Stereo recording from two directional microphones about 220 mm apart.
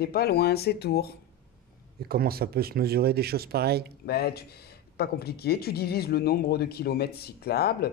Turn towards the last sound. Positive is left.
turn(degrees=45)  # may be behind; listen again after turning